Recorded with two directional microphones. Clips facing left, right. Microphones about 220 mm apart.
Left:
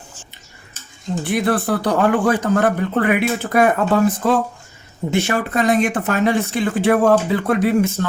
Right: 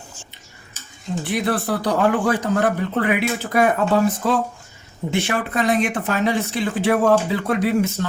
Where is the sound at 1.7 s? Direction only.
50° left (ahead or behind).